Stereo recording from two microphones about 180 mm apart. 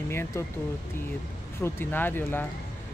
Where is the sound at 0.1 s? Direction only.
15° left (ahead or behind).